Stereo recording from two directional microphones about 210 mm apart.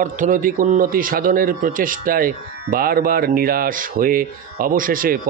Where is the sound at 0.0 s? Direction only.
40° right (ahead or behind).